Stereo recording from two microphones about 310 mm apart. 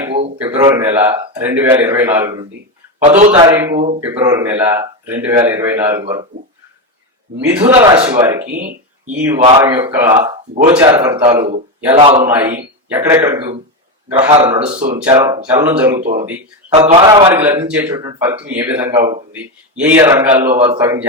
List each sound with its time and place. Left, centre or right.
0.0 s a man's voice: centre
3.2 s a man's voice: right
3.4 s a man's voice: centre
7.7 s a man's voice: centre
12.2 s a man's voice: centre
14.2 s a man's voice: centre
14.4 s a man's voice: centre
16.7 s a man's voice: centre